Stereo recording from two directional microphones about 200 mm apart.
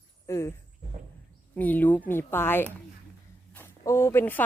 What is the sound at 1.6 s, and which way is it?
Speech, 10° left (ahead or behind).